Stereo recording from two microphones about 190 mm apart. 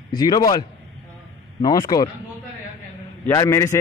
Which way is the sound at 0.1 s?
20° left (ahead or behind).